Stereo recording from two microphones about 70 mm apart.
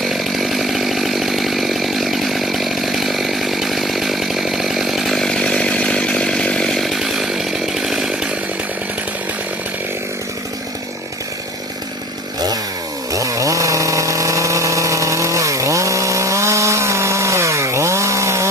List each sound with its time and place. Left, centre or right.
0.0 s chainsaw: centre
13.1 s chainsaw: right